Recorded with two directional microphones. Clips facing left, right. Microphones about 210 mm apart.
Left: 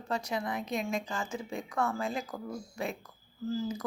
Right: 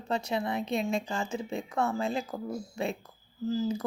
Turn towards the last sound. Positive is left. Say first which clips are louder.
# right 4 dB
turn(degrees=-25)  # may be behind; listen again after turning